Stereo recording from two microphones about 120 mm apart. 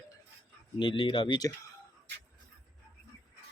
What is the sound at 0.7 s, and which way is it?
Speech, 45° left (ahead or behind).